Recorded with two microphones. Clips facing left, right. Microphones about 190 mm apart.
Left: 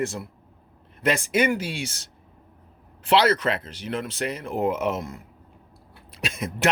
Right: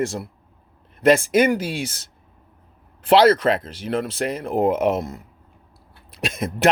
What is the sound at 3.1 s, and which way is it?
Speech, 40° right (ahead or behind).